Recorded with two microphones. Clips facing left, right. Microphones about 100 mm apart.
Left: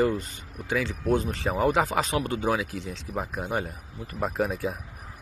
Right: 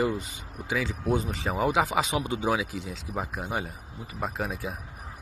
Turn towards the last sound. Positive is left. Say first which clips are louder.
# left 5 dB
turn(degrees=0)  # may be behind; listen again after turning